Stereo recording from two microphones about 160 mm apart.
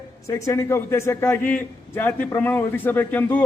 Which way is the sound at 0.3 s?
20° left (ahead or behind).